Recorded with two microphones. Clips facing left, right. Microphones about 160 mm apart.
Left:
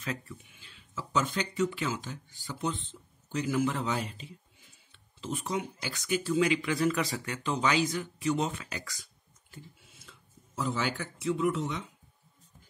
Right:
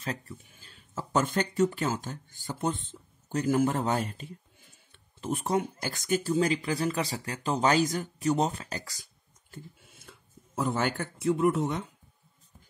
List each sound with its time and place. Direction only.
0.0 s speech: 35° right (ahead or behind)
9.5 s speech: 50° right (ahead or behind)